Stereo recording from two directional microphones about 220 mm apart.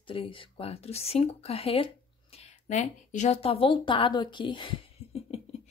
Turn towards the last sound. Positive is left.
turn(degrees=25)  # may be behind; listen again after turning